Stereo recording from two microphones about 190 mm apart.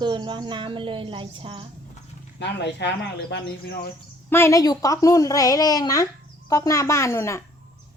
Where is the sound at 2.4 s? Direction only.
65° left (ahead or behind).